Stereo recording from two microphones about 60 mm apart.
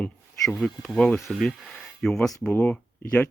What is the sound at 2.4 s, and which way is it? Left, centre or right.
Speech, left.